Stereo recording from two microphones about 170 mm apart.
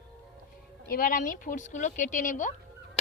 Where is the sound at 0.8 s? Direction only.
60° left (ahead or behind).